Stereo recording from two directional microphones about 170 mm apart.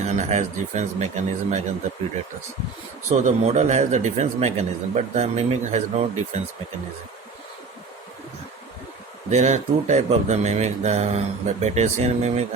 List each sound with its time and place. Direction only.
0.0 s speech: 45° right (ahead or behind)
3.1 s speech: 40° right (ahead or behind)
9.3 s speech: 45° right (ahead or behind)